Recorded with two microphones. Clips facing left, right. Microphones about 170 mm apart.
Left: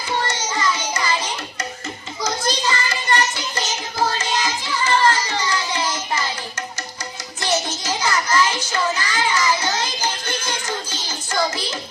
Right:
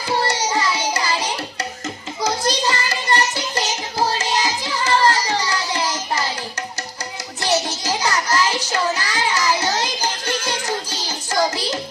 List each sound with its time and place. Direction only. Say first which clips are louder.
0.2 s carnatic music: right 3 dB; 35° right (ahead or behind)
2.2 s music: right 2 dB; 35° right (ahead or behind)
7.4 s music: right 2 dB; 35° right (ahead or behind)